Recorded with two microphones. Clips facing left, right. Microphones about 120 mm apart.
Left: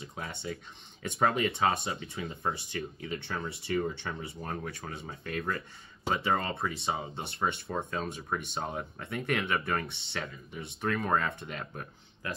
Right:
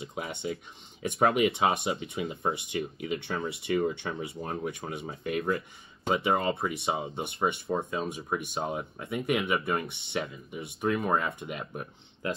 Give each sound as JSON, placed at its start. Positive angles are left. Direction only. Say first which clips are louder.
{"t": 0.0, "sound": "speech", "louder": "right 5 dB", "side_deg": -20}
{"t": 12.2, "sound": "speech", "louder": "right 6 dB", "side_deg": -25}